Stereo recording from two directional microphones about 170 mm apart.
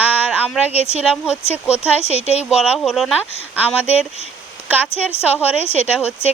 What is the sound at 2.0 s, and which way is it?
Speech, 40° left (ahead or behind).